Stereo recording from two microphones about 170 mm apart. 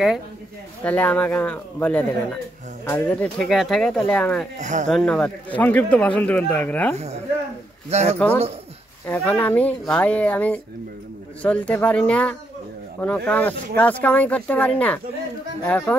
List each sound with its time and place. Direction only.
0.8 s speech: 10° left (ahead or behind)
4.6 s speech: 45° right (ahead or behind)
4.9 s speech: 5° left (ahead or behind)
7.9 s speech: 40° right (ahead or behind)
9.0 s speech: 10° left (ahead or behind)